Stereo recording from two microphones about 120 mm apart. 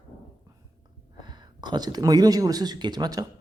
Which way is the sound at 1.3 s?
35° right (ahead or behind).